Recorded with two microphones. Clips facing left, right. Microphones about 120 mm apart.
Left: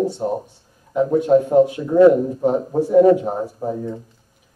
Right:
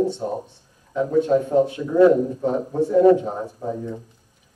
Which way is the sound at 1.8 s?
25° left (ahead or behind).